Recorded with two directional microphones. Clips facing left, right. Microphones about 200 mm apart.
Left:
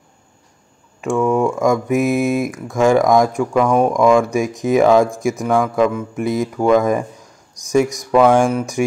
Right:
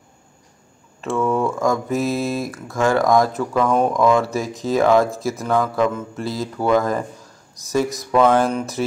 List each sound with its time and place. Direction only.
1.0 s speech: 15° left (ahead or behind)
8.1 s speech: 10° left (ahead or behind)